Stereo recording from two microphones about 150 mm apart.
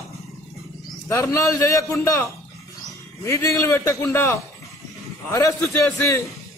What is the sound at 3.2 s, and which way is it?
Speech, 20° left (ahead or behind).